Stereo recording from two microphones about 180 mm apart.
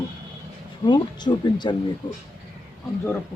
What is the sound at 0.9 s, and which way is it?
Speech, 25° left (ahead or behind).